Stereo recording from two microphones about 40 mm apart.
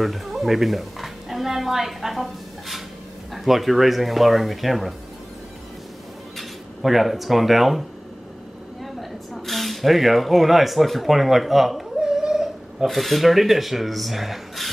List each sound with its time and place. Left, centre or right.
0.0 s speech: centre
3.3 s speech: centre
6.3 s speech: centre
9.3 s speech: centre
12.0 s a sound: centre
12.8 s speech: centre